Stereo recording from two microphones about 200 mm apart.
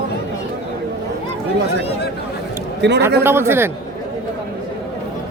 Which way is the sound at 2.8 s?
55° right (ahead or behind).